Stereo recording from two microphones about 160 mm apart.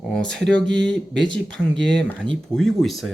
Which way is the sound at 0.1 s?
5° left (ahead or behind).